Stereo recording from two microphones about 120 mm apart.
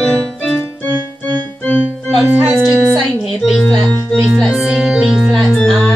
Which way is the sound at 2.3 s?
15° right (ahead or behind).